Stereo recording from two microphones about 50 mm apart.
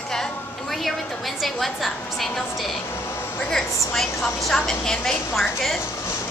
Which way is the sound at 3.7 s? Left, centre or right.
Left.